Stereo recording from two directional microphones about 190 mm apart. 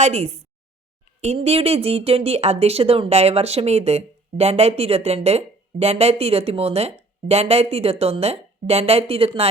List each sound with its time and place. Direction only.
0.0 s speech: 35° right (ahead or behind)